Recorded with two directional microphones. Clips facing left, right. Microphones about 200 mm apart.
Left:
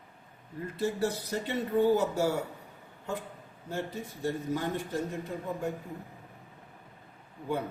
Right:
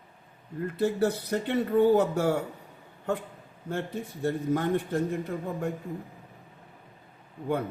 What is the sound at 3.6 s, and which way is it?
Speech, 55° right (ahead or behind).